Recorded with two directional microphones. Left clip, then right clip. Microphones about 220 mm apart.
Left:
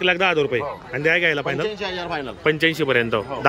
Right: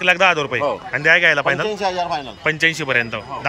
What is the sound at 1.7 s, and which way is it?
Speech, 25° right (ahead or behind).